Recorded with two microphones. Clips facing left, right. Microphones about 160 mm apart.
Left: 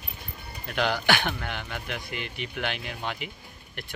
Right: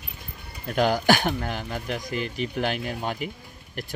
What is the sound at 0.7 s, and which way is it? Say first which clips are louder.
Speech: right 5 dB; 45° right (ahead or behind).